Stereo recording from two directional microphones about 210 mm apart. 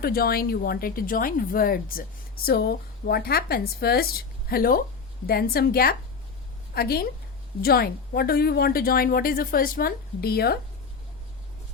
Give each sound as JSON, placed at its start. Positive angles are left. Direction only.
{"t": 0.0, "sound": "speech", "side_deg": 45}